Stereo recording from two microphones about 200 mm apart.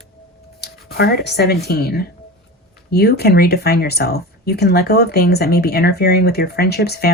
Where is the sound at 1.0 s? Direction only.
55° left (ahead or behind).